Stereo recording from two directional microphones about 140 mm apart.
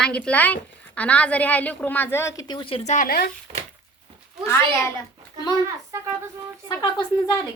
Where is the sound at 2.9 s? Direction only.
75° left (ahead or behind).